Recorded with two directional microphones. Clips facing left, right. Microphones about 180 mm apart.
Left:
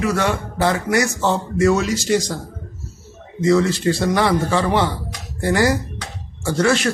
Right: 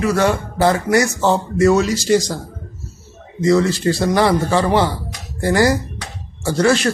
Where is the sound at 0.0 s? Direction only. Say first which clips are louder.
Right 3 dB; 40° right (ahead or behind).